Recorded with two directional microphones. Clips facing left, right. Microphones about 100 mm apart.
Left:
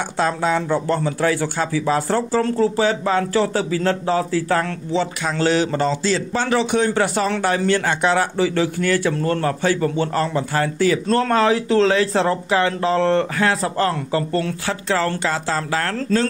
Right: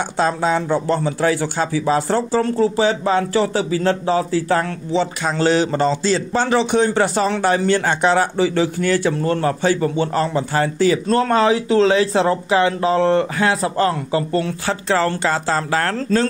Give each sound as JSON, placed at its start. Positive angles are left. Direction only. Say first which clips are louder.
{"t": 0.2, "sound": "speech", "louder": "right 1 dB", "side_deg": -25}
{"t": 11.1, "sound": "speech", "louder": "even", "side_deg": -15}
{"t": 14.7, "sound": "speech", "louder": "right 3 dB", "side_deg": -30}